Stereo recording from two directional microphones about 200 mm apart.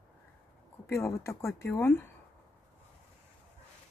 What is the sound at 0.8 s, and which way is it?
Speech, 15° left (ahead or behind).